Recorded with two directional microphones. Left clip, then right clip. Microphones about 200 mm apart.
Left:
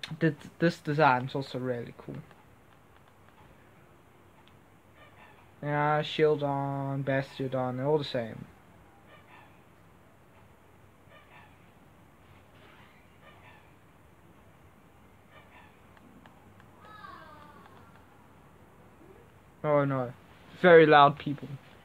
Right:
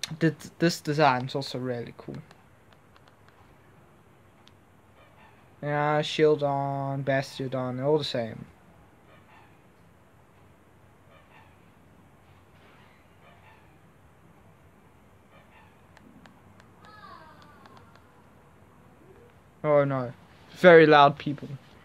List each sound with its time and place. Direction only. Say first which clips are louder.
0.0 s mantra: right 3 dB; 30° right (ahead or behind)
5.6 s mantra: right 2 dB; 30° right (ahead or behind)
19.6 s mantra: right 4 dB; 25° right (ahead or behind)
20.5 s speech: right 3 dB; 35° right (ahead or behind)
20.8 s mantra: right 2 dB; 20° right (ahead or behind)